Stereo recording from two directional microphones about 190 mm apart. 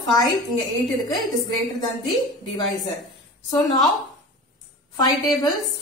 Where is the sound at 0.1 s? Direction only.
20° left (ahead or behind).